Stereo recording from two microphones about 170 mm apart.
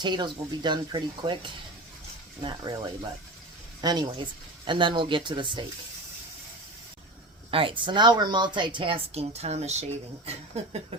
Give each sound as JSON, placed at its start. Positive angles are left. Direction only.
{"t": 0.0, "sound": "a woman's voice", "side_deg": -25}
{"t": 7.5, "sound": "a woman's voice", "side_deg": -30}